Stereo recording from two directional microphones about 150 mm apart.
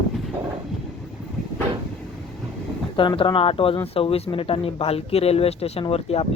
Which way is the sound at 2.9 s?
35° left (ahead or behind).